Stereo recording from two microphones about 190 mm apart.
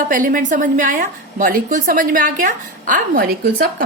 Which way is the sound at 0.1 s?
45° right (ahead or behind).